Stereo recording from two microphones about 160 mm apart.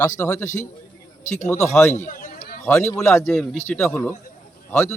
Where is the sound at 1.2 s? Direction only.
45° left (ahead or behind).